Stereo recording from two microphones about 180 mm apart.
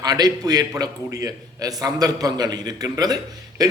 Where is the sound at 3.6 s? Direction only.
20° right (ahead or behind).